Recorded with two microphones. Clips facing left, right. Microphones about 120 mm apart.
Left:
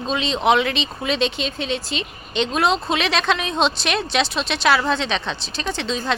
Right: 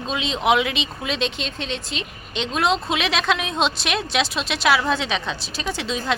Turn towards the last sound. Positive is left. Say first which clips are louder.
# left 1 dB
turn(degrees=-5)  # may be behind; listen again after turning